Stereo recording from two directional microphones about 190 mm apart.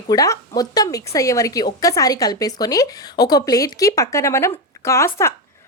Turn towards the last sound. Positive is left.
turn(degrees=15)  # may be behind; listen again after turning